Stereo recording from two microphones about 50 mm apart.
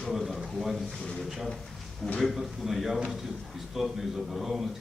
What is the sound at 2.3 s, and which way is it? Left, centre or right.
A man's voice, centre.